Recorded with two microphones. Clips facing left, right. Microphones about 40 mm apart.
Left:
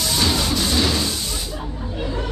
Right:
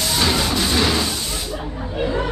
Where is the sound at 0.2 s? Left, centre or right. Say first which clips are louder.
Right 2 dB; right.